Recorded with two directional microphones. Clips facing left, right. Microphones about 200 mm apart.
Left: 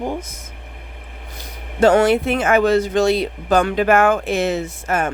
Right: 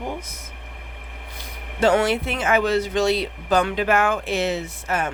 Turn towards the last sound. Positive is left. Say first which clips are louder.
# left 4 dB
turn(degrees=50)  # may be behind; listen again after turning